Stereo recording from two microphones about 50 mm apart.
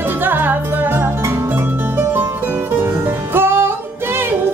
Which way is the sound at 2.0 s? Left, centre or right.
Right.